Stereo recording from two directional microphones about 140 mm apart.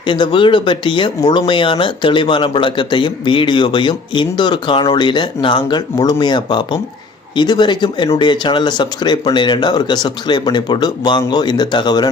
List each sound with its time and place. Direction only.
0.0 s speech: 35° left (ahead or behind)